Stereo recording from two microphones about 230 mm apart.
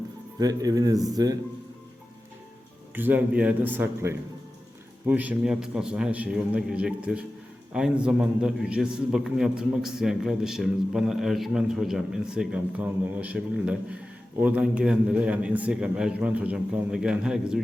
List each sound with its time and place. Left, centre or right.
0.3 s speech: centre
2.9 s a man's voice: centre